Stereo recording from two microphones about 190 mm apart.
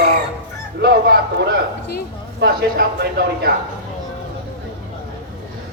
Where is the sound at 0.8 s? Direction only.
60° right (ahead or behind).